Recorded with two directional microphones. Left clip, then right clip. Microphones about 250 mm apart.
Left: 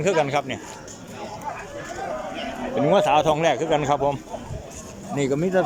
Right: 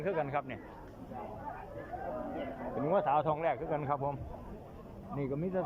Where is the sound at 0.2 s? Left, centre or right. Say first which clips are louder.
Left 13 dB; centre.